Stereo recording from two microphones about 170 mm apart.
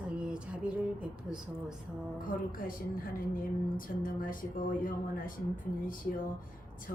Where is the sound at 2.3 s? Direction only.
55° left (ahead or behind).